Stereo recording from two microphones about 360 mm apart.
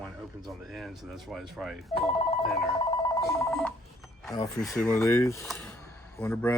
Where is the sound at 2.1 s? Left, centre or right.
Centre.